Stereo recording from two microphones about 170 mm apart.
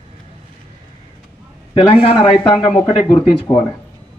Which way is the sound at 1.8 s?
25° left (ahead or behind).